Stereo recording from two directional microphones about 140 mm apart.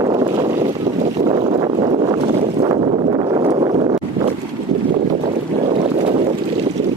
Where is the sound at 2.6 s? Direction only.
40° right (ahead or behind).